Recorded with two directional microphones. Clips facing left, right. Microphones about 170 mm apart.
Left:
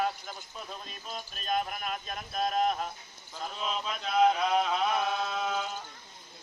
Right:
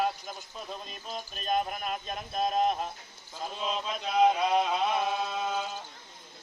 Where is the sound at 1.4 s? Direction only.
35° right (ahead or behind).